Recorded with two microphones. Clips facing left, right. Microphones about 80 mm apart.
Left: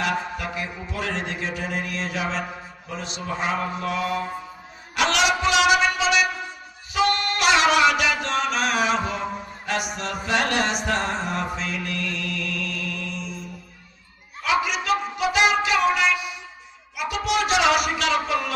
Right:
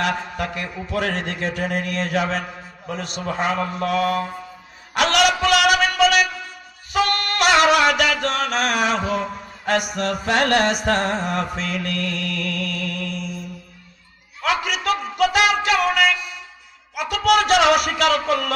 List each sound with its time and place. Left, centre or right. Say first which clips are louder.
0.0 s mantra: right 2 dB; right
4.9 s a sound: right 3 dB; right
6.9 s music: right 1 dB; right
9.9 s mantra: right 4 dB; right
14.4 s a sound: right 1 dB; right
15.6 s music: right 2 dB; right
16.9 s speech: right 6 dB; right